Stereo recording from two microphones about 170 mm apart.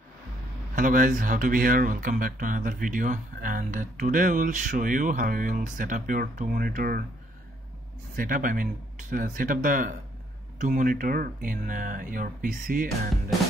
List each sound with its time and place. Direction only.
0.7 s speech: 50° right (ahead or behind)
8.2 s speech: 55° right (ahead or behind)